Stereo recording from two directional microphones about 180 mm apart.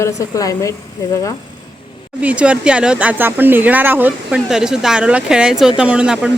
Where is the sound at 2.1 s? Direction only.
5° right (ahead or behind).